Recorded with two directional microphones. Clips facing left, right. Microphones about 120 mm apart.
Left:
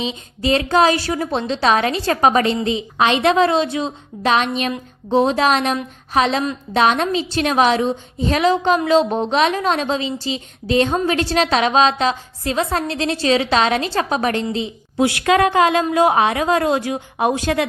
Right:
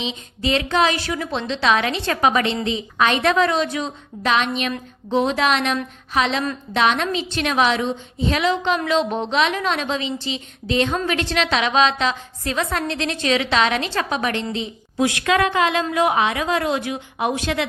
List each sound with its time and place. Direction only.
0.0 s a woman's voice: 40° left (ahead or behind)
3.0 s a woman's voice: 30° left (ahead or behind)